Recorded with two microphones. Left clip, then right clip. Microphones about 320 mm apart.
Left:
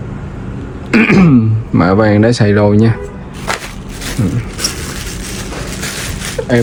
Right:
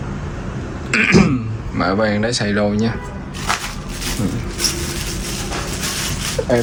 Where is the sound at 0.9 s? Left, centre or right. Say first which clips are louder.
Left 4 dB; centre.